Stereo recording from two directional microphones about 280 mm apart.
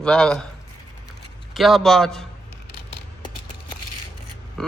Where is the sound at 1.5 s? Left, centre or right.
Centre.